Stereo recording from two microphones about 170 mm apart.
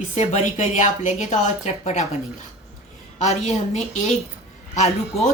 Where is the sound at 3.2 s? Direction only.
45° left (ahead or behind).